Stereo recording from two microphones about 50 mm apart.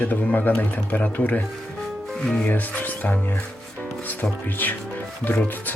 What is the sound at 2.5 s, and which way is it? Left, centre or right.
Speech, left.